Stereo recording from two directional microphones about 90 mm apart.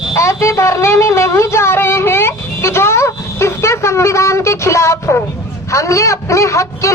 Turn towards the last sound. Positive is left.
turn(degrees=35)  # may be behind; listen again after turning